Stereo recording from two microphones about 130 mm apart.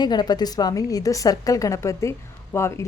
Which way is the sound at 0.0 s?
35° left (ahead or behind).